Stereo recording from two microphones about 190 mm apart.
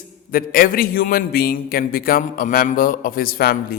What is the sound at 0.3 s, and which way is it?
A man's voice, 50° left (ahead or behind).